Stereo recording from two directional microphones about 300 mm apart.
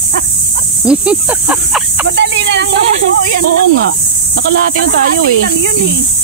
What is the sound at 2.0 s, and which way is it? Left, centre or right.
Speech, right.